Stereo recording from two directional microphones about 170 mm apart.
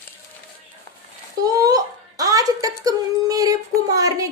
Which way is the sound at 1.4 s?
20° right (ahead or behind).